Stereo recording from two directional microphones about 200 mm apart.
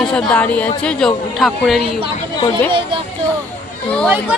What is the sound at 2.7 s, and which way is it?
Speech, 25° right (ahead or behind).